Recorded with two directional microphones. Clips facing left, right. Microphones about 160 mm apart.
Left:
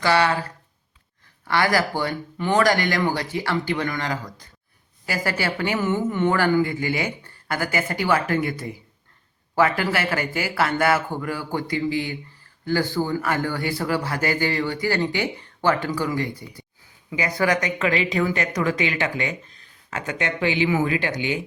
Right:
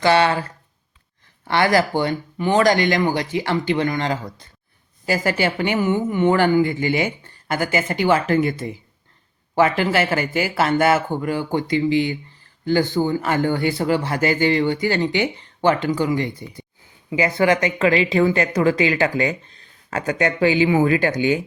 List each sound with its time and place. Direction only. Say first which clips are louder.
0.0 s speech: right 3 dB; 25° right (ahead or behind)
1.5 s a woman's voice: right 4 dB; 25° right (ahead or behind); by 21.3 s 45° right (ahead or behind)